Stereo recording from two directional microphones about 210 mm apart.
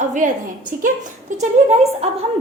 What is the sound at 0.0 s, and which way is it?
A woman's voice, 35° right (ahead or behind).